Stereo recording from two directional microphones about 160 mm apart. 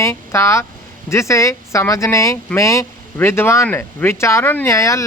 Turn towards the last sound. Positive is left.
turn(degrees=20)  # may be behind; listen again after turning